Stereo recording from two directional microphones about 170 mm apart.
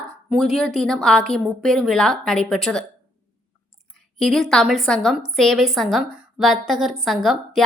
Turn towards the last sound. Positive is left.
turn(degrees=0)  # may be behind; listen again after turning